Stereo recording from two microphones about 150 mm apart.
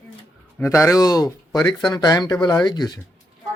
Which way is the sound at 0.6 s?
20° left (ahead or behind).